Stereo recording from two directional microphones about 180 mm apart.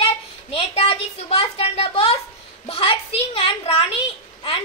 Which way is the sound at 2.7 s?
30° left (ahead or behind).